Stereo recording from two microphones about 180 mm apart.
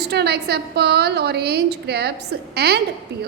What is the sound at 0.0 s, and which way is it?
A woman's voice, 65° right (ahead or behind).